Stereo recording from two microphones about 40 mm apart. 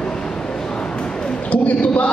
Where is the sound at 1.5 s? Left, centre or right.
Left.